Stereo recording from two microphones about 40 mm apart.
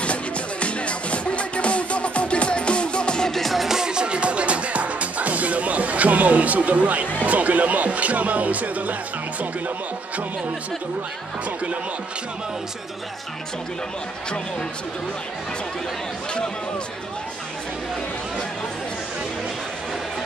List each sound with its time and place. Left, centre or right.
0.0 s music: left
3.3 s music: centre
3.6 s music: centre; by 7.1 s right
7.2 s speech: right